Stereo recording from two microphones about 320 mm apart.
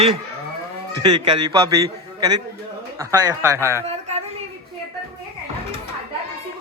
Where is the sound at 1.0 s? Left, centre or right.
Centre.